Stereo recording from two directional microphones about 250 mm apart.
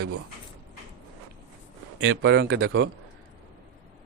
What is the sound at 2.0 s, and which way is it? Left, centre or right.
Speech, right.